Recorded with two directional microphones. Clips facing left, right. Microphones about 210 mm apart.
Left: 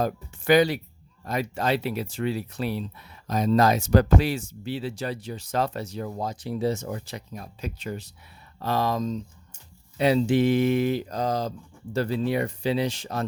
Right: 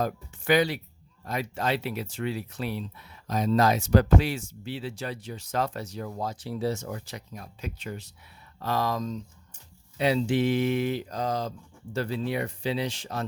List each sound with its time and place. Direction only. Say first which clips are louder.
0.0 s speech: left 3 dB; 40° left (ahead or behind); by 9.6 s 25° left (ahead or behind)
10.0 s speech: left 4 dB; 40° left (ahead or behind)